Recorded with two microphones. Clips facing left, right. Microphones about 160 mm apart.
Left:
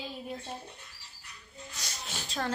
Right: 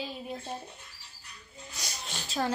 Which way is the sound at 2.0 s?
5° right (ahead or behind).